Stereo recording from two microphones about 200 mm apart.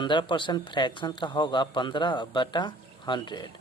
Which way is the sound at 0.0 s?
25° left (ahead or behind).